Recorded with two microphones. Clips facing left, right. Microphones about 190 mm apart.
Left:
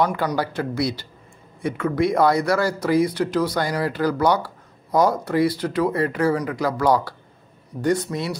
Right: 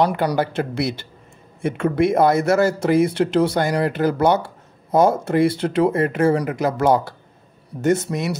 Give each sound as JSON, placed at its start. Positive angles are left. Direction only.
{"t": 0.4, "sound": "speech", "side_deg": -25}